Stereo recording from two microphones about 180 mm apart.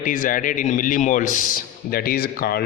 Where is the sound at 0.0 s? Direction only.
50° left (ahead or behind).